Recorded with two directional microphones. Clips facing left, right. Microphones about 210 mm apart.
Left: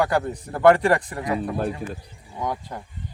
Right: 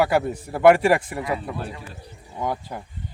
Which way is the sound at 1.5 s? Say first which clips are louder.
Left 7 dB; 50° left (ahead or behind).